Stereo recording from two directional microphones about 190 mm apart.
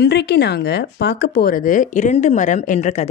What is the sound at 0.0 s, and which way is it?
Speech, 60° left (ahead or behind).